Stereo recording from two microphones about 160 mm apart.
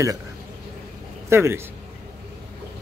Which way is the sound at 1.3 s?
15° right (ahead or behind).